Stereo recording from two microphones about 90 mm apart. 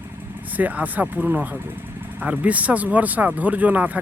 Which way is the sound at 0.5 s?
15° right (ahead or behind).